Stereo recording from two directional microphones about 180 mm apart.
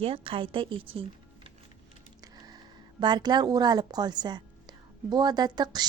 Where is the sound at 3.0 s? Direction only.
25° right (ahead or behind).